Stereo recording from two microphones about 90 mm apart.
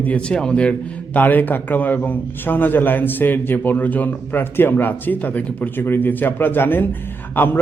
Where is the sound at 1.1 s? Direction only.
20° left (ahead or behind).